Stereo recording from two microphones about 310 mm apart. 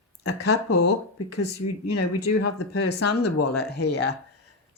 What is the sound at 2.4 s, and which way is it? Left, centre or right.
Speech, left.